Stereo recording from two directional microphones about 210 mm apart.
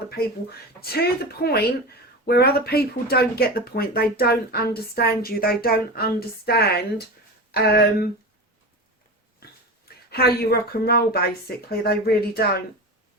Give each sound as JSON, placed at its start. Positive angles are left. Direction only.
{"t": 0.8, "sound": "speech", "side_deg": 45}
{"t": 9.4, "sound": "dog", "side_deg": 45}
{"t": 10.1, "sound": "speech", "side_deg": 50}